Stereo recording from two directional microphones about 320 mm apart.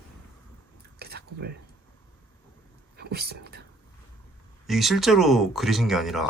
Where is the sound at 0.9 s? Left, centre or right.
Right.